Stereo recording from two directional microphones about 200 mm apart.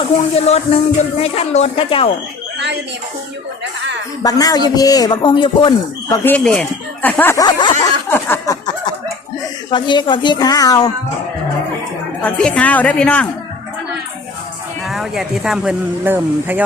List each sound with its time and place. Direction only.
0.0 s a man's voice: 30° left (ahead or behind)
4.2 s a man's voice: 20° left (ahead or behind)
6.2 s speech: 5° left (ahead or behind)
8.1 s a sound: 15° left (ahead or behind)
9.6 s a man's voice: 25° left (ahead or behind)
12.2 s speech: 5° left (ahead or behind)
14.8 s speech: centre (ahead or behind)